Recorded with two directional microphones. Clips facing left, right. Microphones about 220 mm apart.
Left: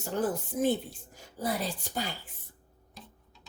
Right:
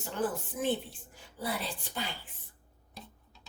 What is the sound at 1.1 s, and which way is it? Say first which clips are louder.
Speech: left 4 dB; 40° left (ahead or behind).